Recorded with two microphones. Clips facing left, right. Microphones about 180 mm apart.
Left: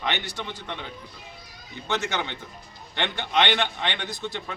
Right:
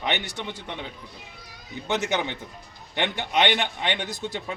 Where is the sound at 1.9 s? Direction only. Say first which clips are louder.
Right 2 dB; 15° right (ahead or behind).